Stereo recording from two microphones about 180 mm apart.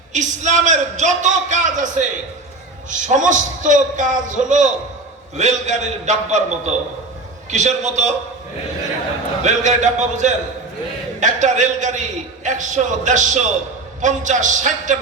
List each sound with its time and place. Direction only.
0.1 s a man's voice: 40° right (ahead or behind)
9.4 s a man's voice: 40° right (ahead or behind)